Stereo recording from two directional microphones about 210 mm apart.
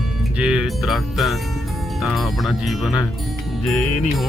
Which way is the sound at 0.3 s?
5° right (ahead or behind).